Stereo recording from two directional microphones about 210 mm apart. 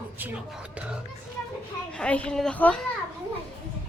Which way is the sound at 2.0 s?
5° left (ahead or behind).